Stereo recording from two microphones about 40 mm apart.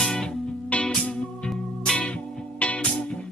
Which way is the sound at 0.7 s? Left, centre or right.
Left.